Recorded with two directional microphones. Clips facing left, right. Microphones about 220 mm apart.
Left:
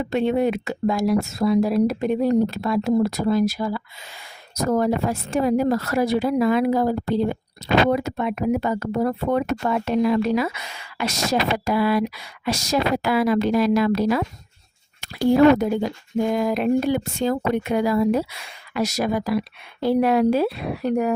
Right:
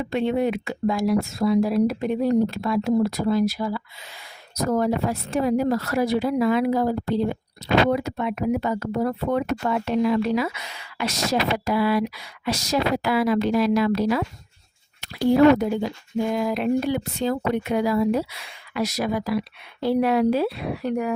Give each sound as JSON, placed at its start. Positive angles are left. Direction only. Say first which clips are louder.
{"t": 0.0, "sound": "speech", "louder": "left 2 dB", "side_deg": 45}
{"t": 7.9, "sound": "speech", "louder": "left 2 dB", "side_deg": 45}